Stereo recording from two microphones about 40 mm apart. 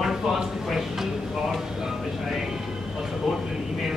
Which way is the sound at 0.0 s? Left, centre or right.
Centre.